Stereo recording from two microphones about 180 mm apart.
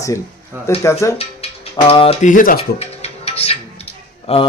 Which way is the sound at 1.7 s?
30° left (ahead or behind).